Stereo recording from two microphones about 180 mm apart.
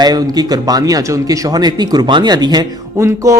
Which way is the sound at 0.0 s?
20° right (ahead or behind).